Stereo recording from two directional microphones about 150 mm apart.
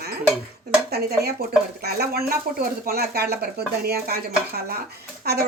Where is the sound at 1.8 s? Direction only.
90° right.